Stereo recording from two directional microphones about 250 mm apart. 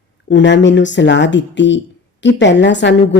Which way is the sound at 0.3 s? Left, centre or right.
Left.